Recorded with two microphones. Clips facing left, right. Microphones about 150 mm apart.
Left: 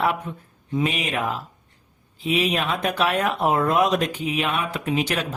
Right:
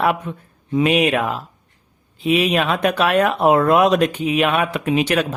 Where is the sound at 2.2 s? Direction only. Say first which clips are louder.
Right 5 dB; 70° right (ahead or behind).